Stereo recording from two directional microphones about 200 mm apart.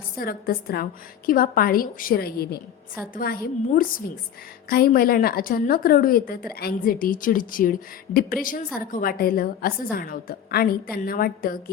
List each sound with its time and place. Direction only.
0.2 s a woman's voice: 50° left (ahead or behind)